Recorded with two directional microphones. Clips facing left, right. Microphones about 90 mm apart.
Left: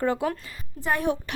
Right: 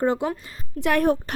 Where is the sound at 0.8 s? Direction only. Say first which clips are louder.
Right 5 dB; 75° right (ahead or behind).